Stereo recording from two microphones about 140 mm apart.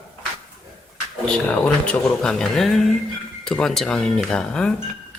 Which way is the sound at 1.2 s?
5° left (ahead or behind).